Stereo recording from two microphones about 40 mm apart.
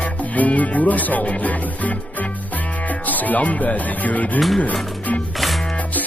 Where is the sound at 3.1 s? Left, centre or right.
Left.